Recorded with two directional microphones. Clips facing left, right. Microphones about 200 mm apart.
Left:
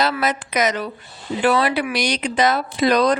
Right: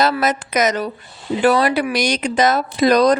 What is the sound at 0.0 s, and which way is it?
A woman's voice, 45° right (ahead or behind).